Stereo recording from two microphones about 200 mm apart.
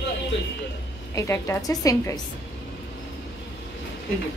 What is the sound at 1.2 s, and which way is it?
A woman's voice, 15° left (ahead or behind).